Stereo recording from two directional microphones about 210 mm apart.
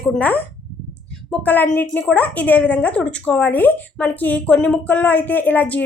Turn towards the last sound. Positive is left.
turn(degrees=10)  # may be behind; listen again after turning